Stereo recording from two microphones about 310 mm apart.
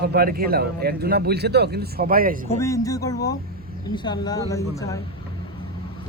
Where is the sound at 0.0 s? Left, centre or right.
Right.